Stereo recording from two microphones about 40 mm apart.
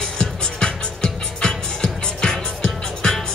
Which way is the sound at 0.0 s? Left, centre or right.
Centre.